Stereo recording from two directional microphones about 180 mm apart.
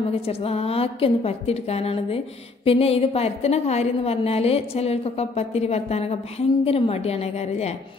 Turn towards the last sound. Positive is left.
turn(degrees=35)  # may be behind; listen again after turning